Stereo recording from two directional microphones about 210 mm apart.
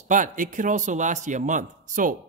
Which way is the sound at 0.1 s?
35° right (ahead or behind).